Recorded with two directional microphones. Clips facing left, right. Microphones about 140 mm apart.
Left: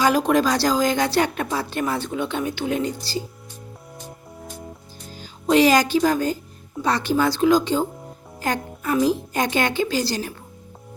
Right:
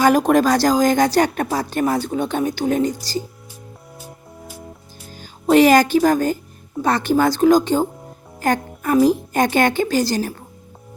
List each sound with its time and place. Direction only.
0.0 s a woman's voice: 50° right (ahead or behind)
3.9 s music: 5° right (ahead or behind)
5.1 s a woman's voice: 50° right (ahead or behind)